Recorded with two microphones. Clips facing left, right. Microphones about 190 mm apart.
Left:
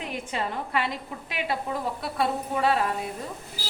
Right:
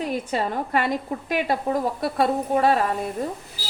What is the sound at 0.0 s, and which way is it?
A woman's voice, 40° right (ahead or behind).